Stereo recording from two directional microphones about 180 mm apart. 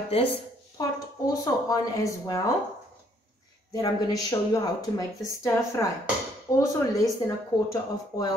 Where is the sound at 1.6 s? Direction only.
20° left (ahead or behind).